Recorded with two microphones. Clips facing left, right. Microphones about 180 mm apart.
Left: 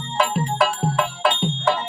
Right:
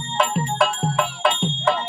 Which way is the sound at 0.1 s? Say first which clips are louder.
Even; 5° left (ahead or behind).